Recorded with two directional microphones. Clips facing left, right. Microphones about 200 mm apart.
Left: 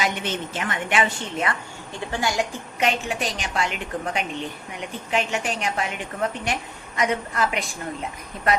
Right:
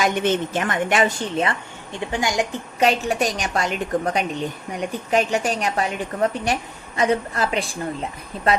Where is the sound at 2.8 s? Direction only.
40° right (ahead or behind).